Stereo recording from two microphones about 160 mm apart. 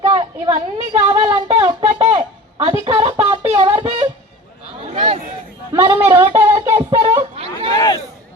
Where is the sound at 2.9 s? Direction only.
40° right (ahead or behind).